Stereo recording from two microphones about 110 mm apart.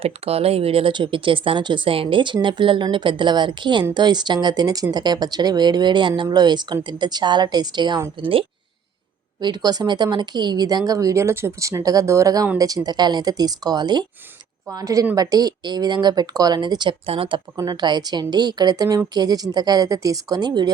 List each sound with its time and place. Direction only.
0.0 s a woman's voice: 65° right (ahead or behind); by 8.0 s 40° right (ahead or behind)
8.2 s speech: 55° right (ahead or behind)
9.4 s a woman's voice: 35° right (ahead or behind)
17.1 s speech: 55° right (ahead or behind)
17.6 s a woman's voice: 40° right (ahead or behind)